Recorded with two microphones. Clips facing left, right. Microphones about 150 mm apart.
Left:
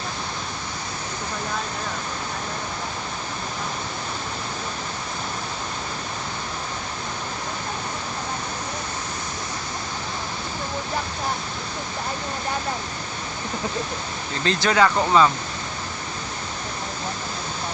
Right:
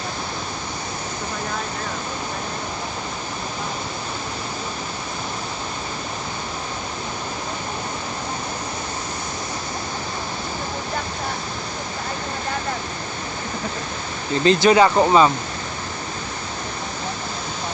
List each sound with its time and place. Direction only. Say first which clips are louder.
14.4 s speech: right 5 dB; 15° right (ahead or behind)